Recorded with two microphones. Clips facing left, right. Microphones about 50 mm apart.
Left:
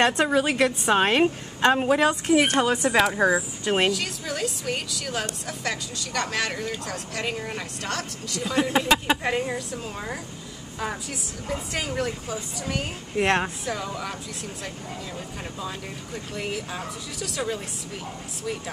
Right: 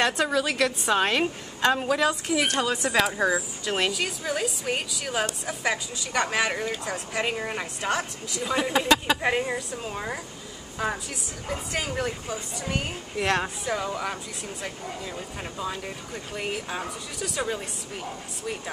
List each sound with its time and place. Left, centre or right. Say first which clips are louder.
0.0 s a woman's voice: left 3 dB; left
2.0 s a woman's voice: left 4 dB; left
3.9 s speech: right 1 dB; centre
8.7 s a woman's voice: right 1 dB; centre
9.2 s speech: right 1 dB; centre
11.4 s speech: left 1 dB; centre
13.1 s a woman's voice: left 3 dB; left
13.7 s speech: right 2 dB; centre
16.3 s speech: right 1 dB; centre